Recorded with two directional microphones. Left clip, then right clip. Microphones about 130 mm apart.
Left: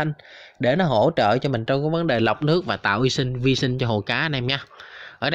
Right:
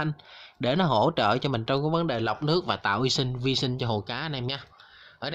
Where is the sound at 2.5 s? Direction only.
20° left (ahead or behind).